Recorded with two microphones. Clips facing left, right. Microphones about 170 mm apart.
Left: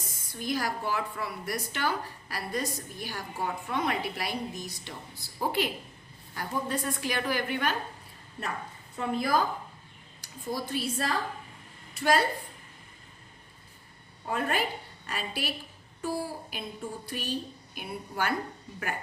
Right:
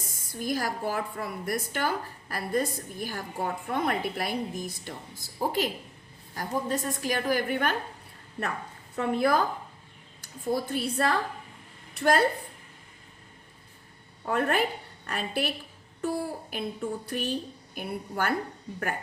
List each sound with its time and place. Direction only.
0.0 s a woman's voice: 50° right (ahead or behind)
9.0 s a child's voice: 60° right (ahead or behind)
10.5 s a child's voice: 55° right (ahead or behind)
14.3 s a woman's voice: 60° right (ahead or behind)